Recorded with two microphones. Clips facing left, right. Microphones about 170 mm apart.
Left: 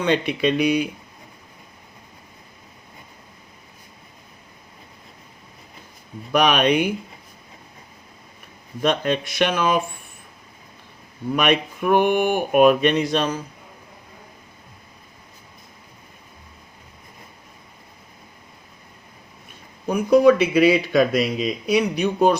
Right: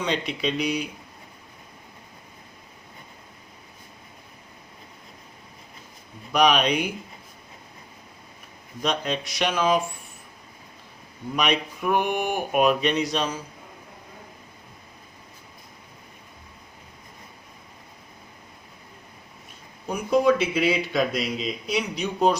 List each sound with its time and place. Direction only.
0.0 s speech: 60° left (ahead or behind)
6.3 s speech: 60° left (ahead or behind)
8.8 s speech: 55° left (ahead or behind)
11.3 s speech: 55° left (ahead or behind)
19.9 s speech: 65° left (ahead or behind)